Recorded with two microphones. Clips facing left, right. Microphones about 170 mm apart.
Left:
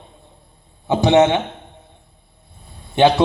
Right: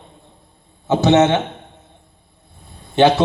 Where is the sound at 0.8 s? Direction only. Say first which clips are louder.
Even; 15° left (ahead or behind).